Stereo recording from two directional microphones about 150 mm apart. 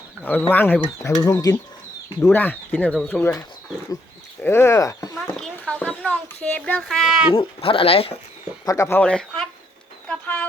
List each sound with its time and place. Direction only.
0.3 s a child's voice: 10° left (ahead or behind)
2.2 s a child's voice: 15° left (ahead or behind)
4.4 s speech: 15° left (ahead or behind)
5.2 s a child's voice: 5° left (ahead or behind)
7.3 s speech: 40° left (ahead or behind)
8.6 s speech: 20° left (ahead or behind)
9.0 s a child's voice: 5° left (ahead or behind)